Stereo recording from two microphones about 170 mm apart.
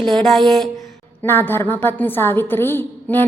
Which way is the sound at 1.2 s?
10° left (ahead or behind).